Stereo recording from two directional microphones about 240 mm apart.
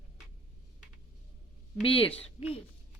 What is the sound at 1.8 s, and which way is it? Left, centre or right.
Speech, left.